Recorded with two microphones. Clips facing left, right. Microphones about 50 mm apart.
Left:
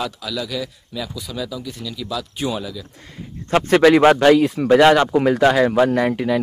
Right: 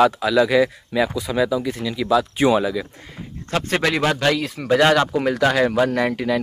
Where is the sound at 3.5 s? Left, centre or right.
Left.